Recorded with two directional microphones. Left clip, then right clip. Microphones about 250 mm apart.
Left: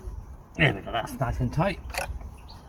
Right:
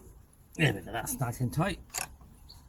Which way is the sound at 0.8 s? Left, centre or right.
Centre.